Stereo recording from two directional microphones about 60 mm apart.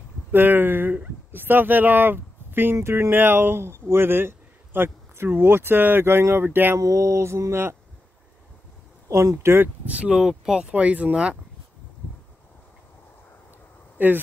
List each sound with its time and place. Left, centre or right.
0.3 s speech: right
6.8 s mantra: right
9.1 s mantra: right
9.8 s speech: centre
13.9 s speech: right